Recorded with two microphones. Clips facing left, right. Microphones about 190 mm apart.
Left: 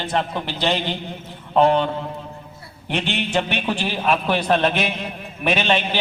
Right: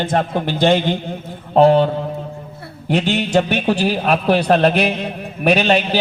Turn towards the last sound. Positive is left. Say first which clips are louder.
# right 5 dB
turn(degrees=-40)  # may be behind; listen again after turning